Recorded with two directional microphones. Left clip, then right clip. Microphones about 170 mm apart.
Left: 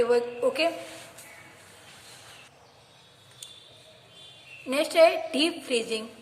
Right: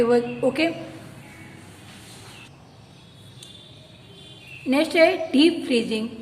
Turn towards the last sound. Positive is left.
turn(degrees=30)  # may be behind; listen again after turning